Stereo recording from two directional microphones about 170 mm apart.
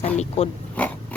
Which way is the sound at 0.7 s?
10° left (ahead or behind).